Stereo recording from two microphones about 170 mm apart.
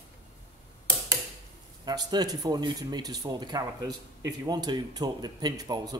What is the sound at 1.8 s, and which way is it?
Speech, 25° right (ahead or behind).